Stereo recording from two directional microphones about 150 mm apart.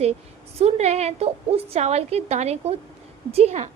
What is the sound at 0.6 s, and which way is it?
A woman's voice, 45° right (ahead or behind).